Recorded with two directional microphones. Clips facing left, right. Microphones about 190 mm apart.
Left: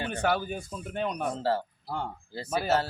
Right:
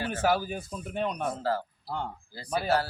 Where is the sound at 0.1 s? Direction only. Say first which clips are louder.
Right 2 dB; centre (ahead or behind).